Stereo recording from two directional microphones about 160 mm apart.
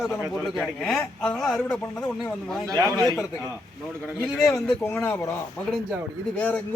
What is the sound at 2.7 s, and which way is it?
Speech, 20° right (ahead or behind).